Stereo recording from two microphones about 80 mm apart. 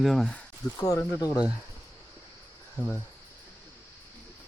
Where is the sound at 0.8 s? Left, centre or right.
Left.